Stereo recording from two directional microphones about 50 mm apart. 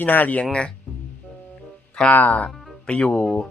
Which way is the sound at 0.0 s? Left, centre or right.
Left.